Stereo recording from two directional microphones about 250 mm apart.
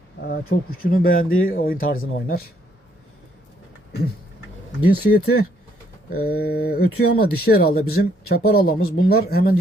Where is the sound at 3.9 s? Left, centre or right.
Left.